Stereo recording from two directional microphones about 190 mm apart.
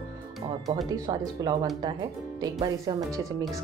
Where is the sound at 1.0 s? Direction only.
20° right (ahead or behind).